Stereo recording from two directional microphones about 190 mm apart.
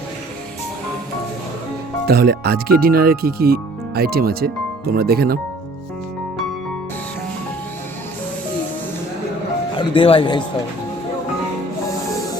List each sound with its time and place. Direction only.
2.0 s speech: 55° right (ahead or behind)
9.7 s speech: 30° left (ahead or behind)